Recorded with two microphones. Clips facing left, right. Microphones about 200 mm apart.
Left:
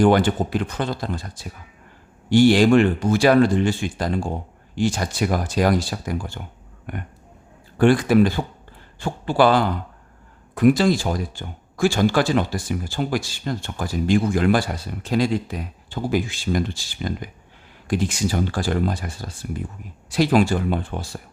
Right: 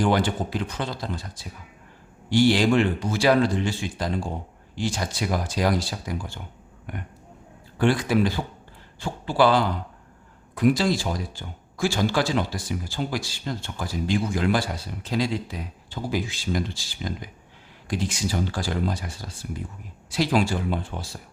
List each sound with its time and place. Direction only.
0.0 s speech: 55° left (ahead or behind)
2.3 s speech: 50° left (ahead or behind)